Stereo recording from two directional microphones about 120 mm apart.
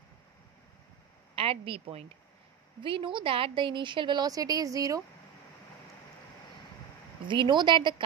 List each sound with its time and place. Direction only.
1.3 s a woman's voice: 50° right (ahead or behind); by 5.0 s 30° right (ahead or behind)
7.2 s speech: 40° right (ahead or behind)